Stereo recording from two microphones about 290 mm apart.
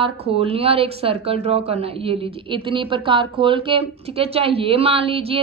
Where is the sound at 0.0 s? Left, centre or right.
Centre.